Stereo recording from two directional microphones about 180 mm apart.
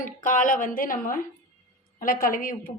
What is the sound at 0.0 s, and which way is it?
Speech, 45° left (ahead or behind).